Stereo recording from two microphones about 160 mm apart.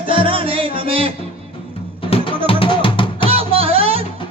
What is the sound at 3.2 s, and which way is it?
Music, 35° right (ahead or behind).